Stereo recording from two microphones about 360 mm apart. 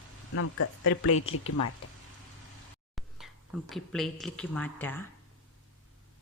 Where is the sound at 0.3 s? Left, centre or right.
Left.